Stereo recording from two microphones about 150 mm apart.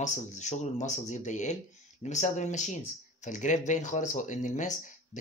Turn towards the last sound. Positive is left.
turn(degrees=55)  # may be behind; listen again after turning